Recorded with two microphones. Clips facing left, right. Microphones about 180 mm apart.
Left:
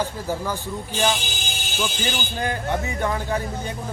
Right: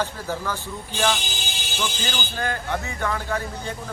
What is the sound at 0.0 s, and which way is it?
Speech, 15° left (ahead or behind).